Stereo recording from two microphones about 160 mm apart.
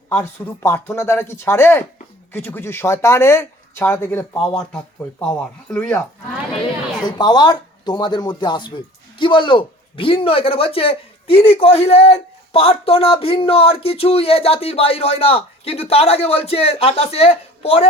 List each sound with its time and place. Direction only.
0.1 s speech: 15° left (ahead or behind)
5.7 s speech: 10° left (ahead or behind)
7.0 s speech: 25° left (ahead or behind)